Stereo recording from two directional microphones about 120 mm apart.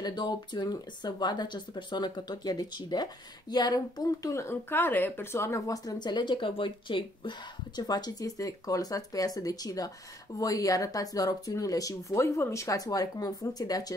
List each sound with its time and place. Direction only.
0.0 s speech: 35° left (ahead or behind)